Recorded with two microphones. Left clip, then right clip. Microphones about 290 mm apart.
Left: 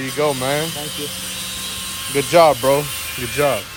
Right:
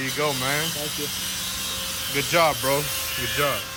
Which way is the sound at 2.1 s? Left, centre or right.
Centre.